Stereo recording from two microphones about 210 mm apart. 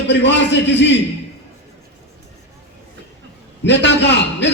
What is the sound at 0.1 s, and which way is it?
Speech, 55° left (ahead or behind).